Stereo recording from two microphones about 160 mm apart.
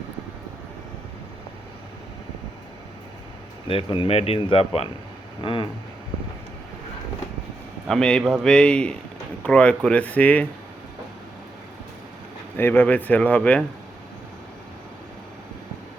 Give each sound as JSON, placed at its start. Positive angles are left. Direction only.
{"t": 3.7, "sound": "speech", "side_deg": 35}
{"t": 7.9, "sound": "a man's voice", "side_deg": 5}
{"t": 12.5, "sound": "speech", "side_deg": 15}